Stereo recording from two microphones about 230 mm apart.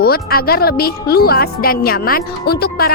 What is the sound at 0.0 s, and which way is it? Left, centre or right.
Speech, left.